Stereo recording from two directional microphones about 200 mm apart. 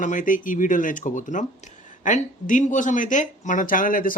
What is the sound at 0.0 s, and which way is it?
Speech, 40° left (ahead or behind).